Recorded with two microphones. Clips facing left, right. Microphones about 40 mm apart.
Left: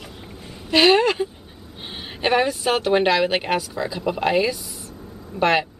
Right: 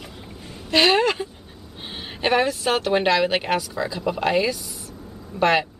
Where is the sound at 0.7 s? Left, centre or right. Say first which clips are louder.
Left 2 dB; centre.